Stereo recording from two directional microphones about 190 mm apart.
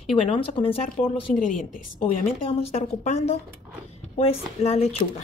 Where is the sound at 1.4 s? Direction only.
45° left (ahead or behind).